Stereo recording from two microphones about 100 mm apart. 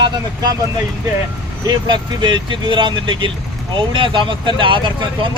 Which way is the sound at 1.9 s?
50° right (ahead or behind).